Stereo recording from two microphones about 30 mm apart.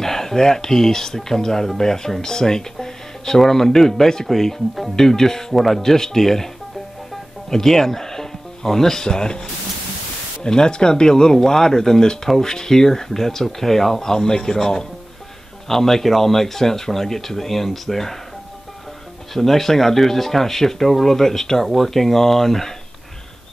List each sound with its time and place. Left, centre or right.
0.0 s speech: centre
5.5 s speech: centre
5.8 s speech: centre
10.4 s speech: left; by 18.2 s centre
19.3 s speech: centre